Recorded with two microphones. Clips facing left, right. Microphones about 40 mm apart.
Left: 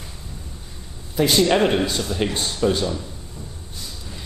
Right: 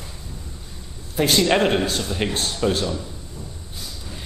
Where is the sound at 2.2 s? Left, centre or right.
Right.